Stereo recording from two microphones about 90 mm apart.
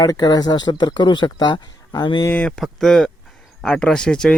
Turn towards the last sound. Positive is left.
turn(degrees=10)  # may be behind; listen again after turning